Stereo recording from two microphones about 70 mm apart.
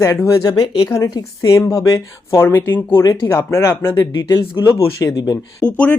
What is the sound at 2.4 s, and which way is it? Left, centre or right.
Speech, left.